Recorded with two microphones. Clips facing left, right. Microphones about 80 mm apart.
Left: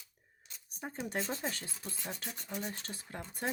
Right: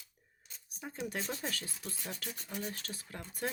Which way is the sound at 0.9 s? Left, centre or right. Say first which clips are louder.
Left 1 dB; left.